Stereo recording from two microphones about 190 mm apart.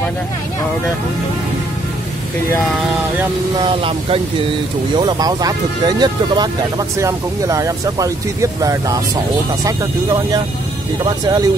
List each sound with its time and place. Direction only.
3.5 s speech: 25° right (ahead or behind)
11.2 s speech: 20° right (ahead or behind)